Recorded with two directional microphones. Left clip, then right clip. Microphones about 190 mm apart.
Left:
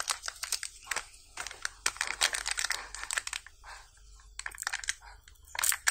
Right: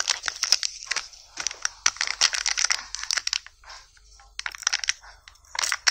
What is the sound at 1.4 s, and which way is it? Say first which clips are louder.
Computer keyboard: right 9 dB; 20° right (ahead or behind).